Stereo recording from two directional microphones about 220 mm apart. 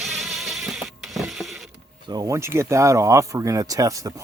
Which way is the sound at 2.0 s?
15° right (ahead or behind).